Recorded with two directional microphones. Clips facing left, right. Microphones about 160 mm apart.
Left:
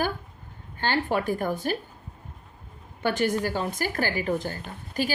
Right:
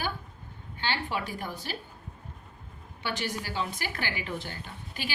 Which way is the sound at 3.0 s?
50° left (ahead or behind).